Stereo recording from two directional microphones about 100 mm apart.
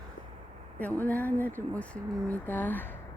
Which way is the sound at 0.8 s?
15° left (ahead or behind).